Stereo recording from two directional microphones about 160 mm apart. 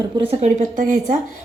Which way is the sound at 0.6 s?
55° right (ahead or behind).